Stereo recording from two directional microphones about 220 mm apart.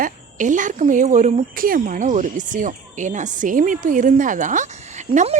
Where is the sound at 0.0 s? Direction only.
35° right (ahead or behind).